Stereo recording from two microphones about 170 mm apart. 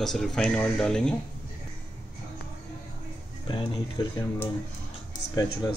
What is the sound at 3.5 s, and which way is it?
Speech, 30° left (ahead or behind).